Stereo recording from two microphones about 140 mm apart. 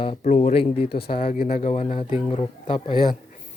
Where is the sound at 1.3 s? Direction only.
90° left.